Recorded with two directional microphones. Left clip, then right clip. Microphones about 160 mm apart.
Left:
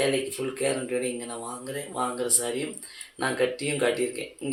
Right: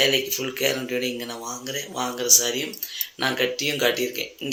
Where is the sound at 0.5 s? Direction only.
15° right (ahead or behind).